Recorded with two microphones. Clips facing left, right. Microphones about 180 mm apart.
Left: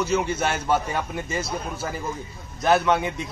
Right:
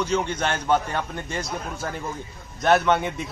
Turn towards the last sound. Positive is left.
turn(degrees=0)  # may be behind; listen again after turning